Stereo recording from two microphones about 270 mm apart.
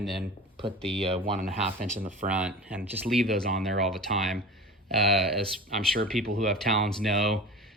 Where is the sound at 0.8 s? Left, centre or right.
Right.